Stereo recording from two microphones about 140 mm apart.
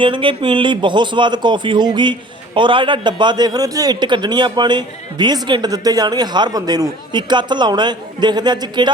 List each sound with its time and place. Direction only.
0.0 s a man's voice: 35° right (ahead or behind)